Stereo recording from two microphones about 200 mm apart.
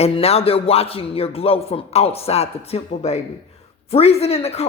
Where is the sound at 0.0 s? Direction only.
30° left (ahead or behind).